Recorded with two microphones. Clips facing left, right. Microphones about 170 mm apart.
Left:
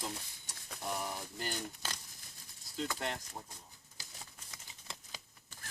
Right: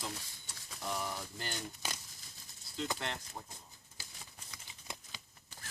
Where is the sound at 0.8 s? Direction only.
15° left (ahead or behind).